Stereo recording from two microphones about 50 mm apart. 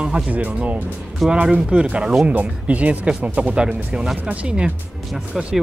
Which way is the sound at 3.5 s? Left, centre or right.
Centre.